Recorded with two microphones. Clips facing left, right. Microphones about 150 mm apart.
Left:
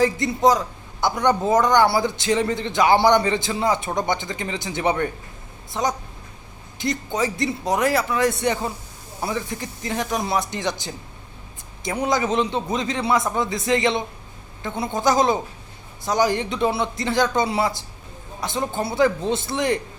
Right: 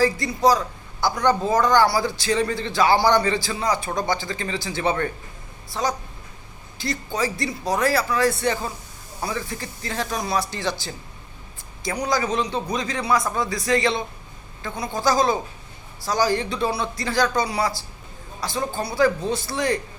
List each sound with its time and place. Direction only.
0.0 s a man's voice: 20° left (ahead or behind)